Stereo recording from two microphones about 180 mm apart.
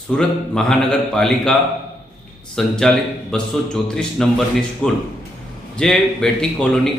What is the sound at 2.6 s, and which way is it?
A man's voice, centre (ahead or behind).